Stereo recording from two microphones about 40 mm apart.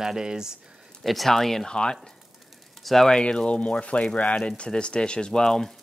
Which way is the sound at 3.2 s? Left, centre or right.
Left.